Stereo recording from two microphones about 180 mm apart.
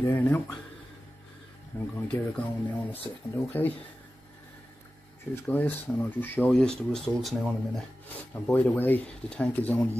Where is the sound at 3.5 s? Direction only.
10° left (ahead or behind).